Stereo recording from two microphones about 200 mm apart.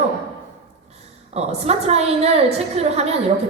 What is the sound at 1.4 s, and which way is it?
A woman's voice, 30° right (ahead or behind).